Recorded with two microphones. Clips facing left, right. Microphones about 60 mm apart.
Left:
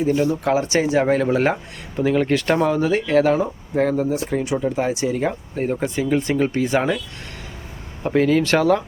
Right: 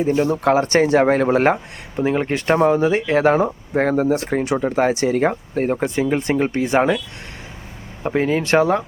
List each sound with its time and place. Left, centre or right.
0.2 s speech: right
2.0 s speech: right
8.0 s speech: right